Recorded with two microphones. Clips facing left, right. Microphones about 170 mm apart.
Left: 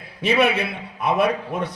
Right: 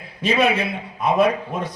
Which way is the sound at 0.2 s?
65° left (ahead or behind).